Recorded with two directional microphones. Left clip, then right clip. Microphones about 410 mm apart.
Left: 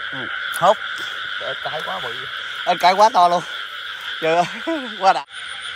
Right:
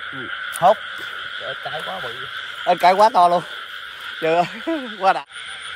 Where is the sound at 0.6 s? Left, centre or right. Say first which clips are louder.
Right 1 dB; centre.